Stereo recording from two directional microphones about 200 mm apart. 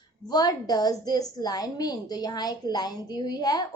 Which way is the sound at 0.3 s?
20° left (ahead or behind).